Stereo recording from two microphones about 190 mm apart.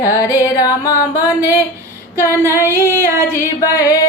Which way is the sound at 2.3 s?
15° left (ahead or behind).